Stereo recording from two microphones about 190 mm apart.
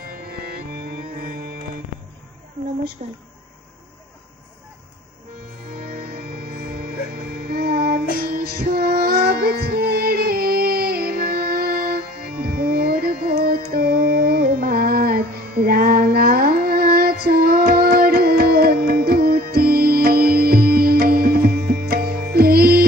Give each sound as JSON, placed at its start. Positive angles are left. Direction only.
{"t": 0.0, "sound": "music", "side_deg": -50}
{"t": 3.0, "sound": "speech", "side_deg": -40}
{"t": 6.4, "sound": "music", "side_deg": -50}